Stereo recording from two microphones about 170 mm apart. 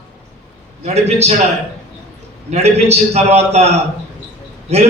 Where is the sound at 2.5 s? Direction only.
40° right (ahead or behind).